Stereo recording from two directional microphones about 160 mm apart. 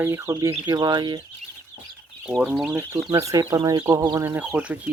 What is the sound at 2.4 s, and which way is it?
Speech, 5° right (ahead or behind).